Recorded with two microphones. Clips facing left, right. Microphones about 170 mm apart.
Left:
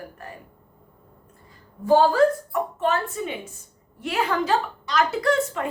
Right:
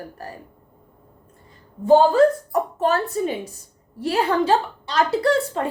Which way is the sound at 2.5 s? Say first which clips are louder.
Right 3 dB; 40° right (ahead or behind).